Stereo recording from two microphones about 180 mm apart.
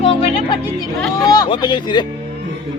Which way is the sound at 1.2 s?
20° left (ahead or behind).